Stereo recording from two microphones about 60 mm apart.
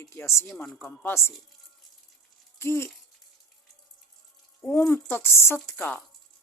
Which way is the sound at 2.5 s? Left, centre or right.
Left.